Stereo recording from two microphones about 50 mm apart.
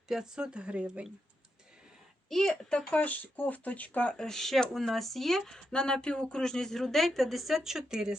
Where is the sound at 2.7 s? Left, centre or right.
Left.